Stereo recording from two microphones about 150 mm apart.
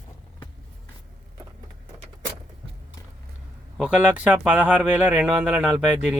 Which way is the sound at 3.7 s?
5° right (ahead or behind).